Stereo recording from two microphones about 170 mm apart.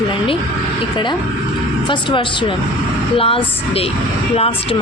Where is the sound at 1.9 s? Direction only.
30° left (ahead or behind).